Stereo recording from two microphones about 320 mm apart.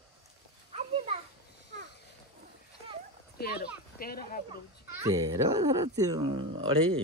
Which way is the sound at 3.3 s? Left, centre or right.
Left.